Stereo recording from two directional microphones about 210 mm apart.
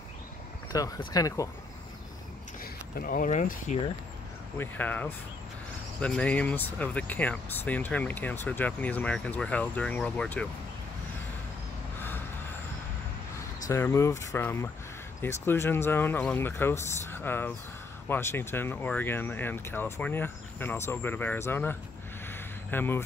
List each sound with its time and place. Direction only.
0.7 s speech: 15° left (ahead or behind)
2.6 s speech: 45° left (ahead or behind)
4.6 s speech: 10° left (ahead or behind)
13.7 s speech: 15° left (ahead or behind)
22.3 s a sound: 10° left (ahead or behind)